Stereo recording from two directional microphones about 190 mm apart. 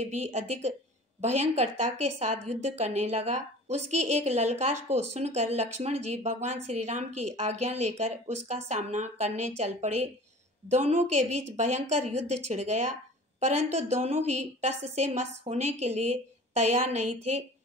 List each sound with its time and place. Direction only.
0.0 s a woman's voice: 35° right (ahead or behind)